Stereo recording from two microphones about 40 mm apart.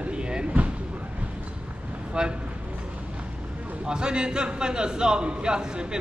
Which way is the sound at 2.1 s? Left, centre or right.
Right.